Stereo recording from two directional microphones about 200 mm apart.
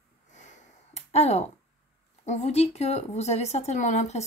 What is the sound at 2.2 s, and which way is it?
A woman's voice, 35° left (ahead or behind).